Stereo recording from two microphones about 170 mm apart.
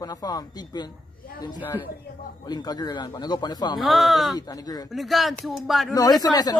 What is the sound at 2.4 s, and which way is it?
Speech, 25° left (ahead or behind).